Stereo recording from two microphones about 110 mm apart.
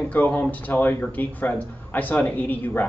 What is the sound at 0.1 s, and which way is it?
Speech, 15° left (ahead or behind).